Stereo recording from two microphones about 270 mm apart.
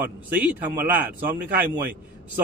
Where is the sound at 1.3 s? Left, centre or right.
Right.